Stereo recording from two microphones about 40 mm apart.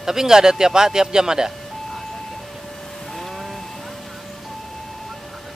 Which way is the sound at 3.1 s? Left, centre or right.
Centre.